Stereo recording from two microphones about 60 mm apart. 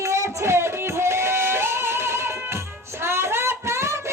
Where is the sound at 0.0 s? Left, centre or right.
Right.